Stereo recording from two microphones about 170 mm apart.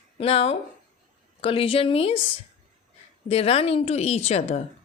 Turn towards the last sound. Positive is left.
turn(degrees=40)  # may be behind; listen again after turning